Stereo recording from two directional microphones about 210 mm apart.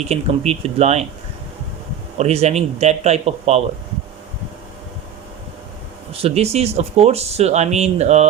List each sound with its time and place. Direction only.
0.1 s speech: 30° right (ahead or behind)
2.1 s speech: 30° right (ahead or behind)
6.2 s speech: 30° right (ahead or behind)